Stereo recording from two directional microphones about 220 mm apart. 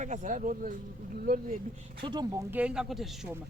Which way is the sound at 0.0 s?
35° right (ahead or behind).